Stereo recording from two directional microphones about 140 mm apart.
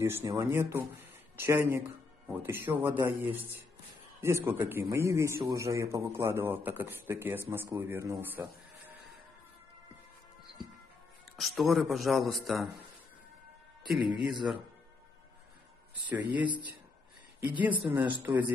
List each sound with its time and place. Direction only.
0.0 s a man's voice: 20° right (ahead or behind)
11.3 s speech: centre (ahead or behind)
13.8 s speech: centre (ahead or behind)
16.2 s speech: 35° right (ahead or behind)
17.6 s a man's voice: 10° right (ahead or behind)